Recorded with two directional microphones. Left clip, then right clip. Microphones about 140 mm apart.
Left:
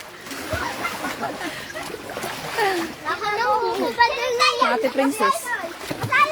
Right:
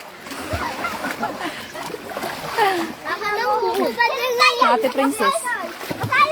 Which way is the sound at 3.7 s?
80° right.